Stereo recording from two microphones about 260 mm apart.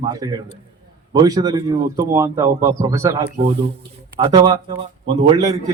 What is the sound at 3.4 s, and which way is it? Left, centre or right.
Speech, right.